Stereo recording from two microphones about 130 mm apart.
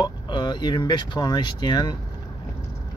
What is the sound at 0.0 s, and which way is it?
Speech, 35° left (ahead or behind).